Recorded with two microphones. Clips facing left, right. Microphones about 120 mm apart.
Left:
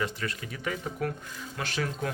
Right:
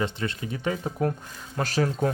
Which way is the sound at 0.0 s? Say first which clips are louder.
Right 4 dB; 25° right (ahead or behind).